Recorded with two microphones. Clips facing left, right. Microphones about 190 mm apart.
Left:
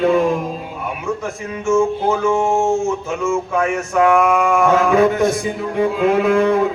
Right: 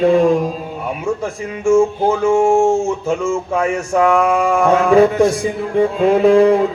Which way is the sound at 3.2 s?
30° right (ahead or behind).